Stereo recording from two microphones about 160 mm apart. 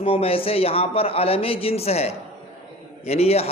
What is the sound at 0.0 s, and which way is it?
A man's voice, 35° left (ahead or behind).